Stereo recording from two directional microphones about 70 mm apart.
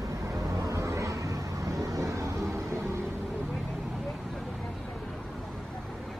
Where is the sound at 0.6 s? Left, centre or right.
Right.